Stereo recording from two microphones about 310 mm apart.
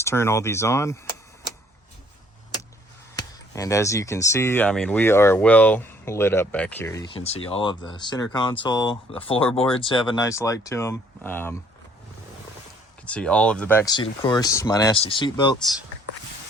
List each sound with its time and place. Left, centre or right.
0.0 s speech: centre
3.2 s speech: centre
13.1 s speech: centre